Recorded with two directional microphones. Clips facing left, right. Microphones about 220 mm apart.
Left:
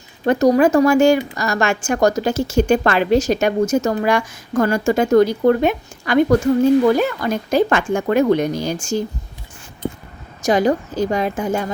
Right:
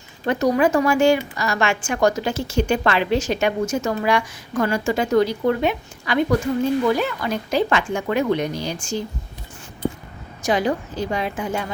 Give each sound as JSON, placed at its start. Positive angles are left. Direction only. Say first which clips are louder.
{"t": 0.3, "sound": "a woman's voice", "louder": "left 5 dB", "side_deg": 40}
{"t": 10.4, "sound": "a woman's voice", "louder": "left 5 dB", "side_deg": 40}